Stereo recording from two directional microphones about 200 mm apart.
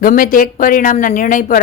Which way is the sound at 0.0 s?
45° left (ahead or behind).